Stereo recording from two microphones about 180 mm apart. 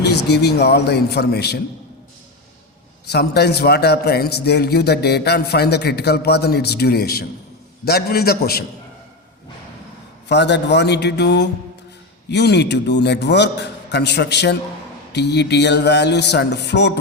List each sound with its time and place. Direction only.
0.0 s a man's voice: 65° left (ahead or behind)
3.1 s a man's voice: 65° left (ahead or behind)
10.2 s a man's voice: 70° left (ahead or behind)